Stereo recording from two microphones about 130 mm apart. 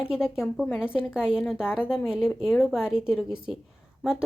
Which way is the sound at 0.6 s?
15° left (ahead or behind).